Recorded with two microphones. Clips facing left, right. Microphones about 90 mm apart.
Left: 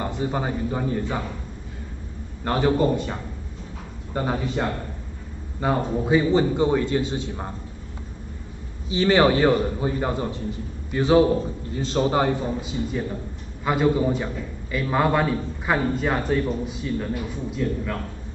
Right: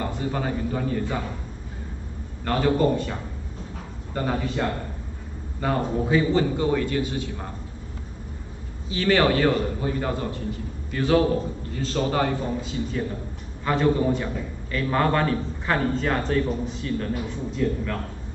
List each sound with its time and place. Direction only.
0.0 s a man's voice: 20° left (ahead or behind)
2.4 s a man's voice: 20° left (ahead or behind)
8.9 s a man's voice: 20° left (ahead or behind)